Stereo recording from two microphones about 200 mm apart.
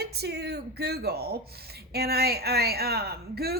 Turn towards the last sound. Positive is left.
turn(degrees=-50)  # may be behind; listen again after turning